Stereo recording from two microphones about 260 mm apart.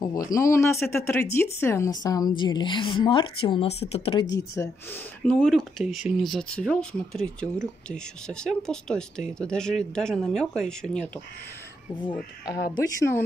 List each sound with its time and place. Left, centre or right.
0.0 s speech: centre
12.0 s speech: centre